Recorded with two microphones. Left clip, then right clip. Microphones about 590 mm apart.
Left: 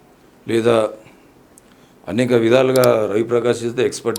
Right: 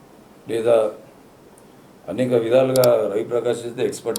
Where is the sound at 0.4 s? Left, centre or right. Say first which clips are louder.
Left 2 dB; left.